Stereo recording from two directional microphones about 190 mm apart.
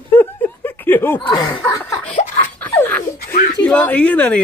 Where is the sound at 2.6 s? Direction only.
10° left (ahead or behind).